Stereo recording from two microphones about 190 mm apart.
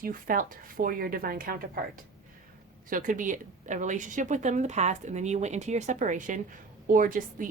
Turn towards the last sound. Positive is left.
turn(degrees=-45)  # may be behind; listen again after turning